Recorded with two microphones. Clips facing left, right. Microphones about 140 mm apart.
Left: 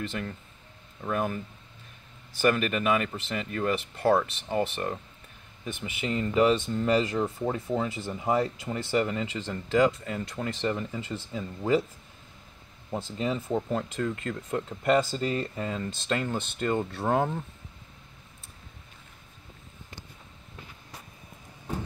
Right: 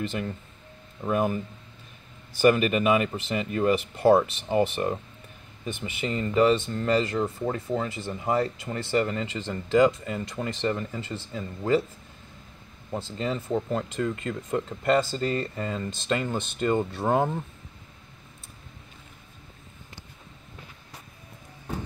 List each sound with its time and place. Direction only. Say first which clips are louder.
0.0 s speech: right 3 dB; 5° right (ahead or behind)
2.4 s speech: right 4 dB; 10° right (ahead or behind)
5.7 s speech: right 1 dB; 5° left (ahead or behind)
12.9 s speech: even; 5° left (ahead or behind)